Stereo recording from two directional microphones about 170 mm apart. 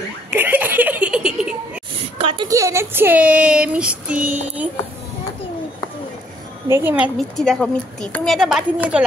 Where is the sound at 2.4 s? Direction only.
20° right (ahead or behind).